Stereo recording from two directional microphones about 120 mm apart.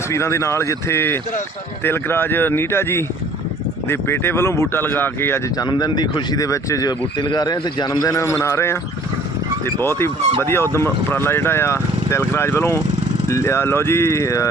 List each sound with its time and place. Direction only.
0.1 s speech: 25° left (ahead or behind)
5.5 s speech: 35° left (ahead or behind)
9.8 s speech: 20° left (ahead or behind)